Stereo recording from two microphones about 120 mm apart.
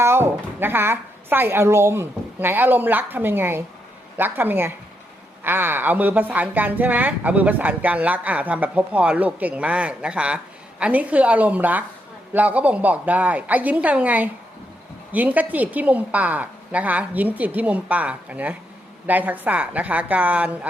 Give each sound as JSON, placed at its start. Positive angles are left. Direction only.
{"t": 0.0, "sound": "a woman's voice", "side_deg": -20}